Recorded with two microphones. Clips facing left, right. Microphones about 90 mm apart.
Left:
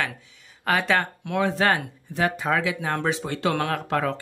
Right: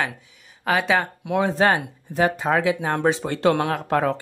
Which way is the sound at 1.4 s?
25° right (ahead or behind).